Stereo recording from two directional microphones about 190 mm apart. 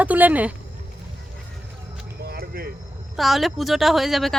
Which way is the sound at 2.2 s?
55° right (ahead or behind).